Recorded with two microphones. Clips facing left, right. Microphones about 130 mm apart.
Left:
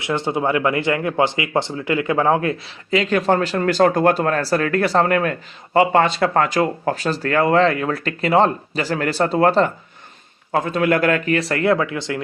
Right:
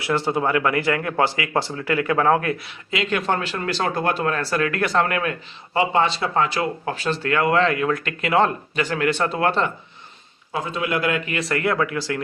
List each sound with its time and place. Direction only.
0.0 s speech: 20° left (ahead or behind); by 9.7 s 40° left (ahead or behind)
10.5 s speech: 55° left (ahead or behind); by 12.2 s 20° left (ahead or behind)